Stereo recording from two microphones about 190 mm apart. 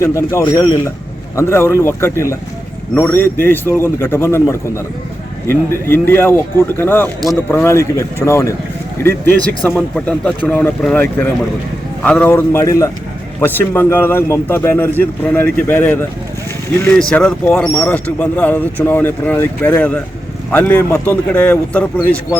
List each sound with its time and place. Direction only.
0.0 s speech: 15° left (ahead or behind)
9.6 s speech: 5° left (ahead or behind)